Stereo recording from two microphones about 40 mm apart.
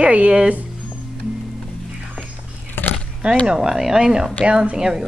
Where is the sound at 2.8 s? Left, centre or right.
Left.